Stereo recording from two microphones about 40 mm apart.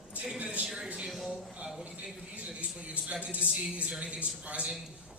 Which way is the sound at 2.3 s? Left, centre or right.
Right.